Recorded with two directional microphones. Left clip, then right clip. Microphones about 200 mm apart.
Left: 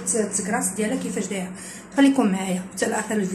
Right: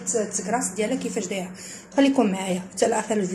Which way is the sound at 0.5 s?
30° right (ahead or behind).